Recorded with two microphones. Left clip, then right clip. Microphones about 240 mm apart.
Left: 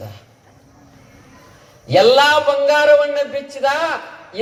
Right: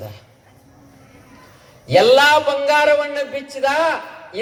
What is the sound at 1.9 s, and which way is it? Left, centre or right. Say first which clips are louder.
A man's voice: even; right.